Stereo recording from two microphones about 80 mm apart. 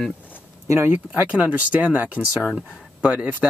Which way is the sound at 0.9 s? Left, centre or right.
Right.